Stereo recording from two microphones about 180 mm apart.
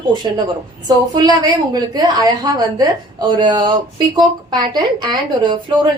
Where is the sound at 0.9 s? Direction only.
20° right (ahead or behind).